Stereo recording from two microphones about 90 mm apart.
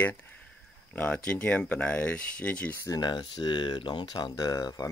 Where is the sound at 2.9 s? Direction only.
55° left (ahead or behind).